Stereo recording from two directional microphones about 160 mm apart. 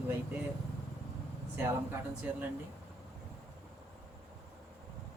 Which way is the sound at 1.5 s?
10° right (ahead or behind).